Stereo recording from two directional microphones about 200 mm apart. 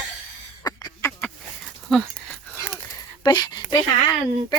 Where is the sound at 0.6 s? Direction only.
20° left (ahead or behind).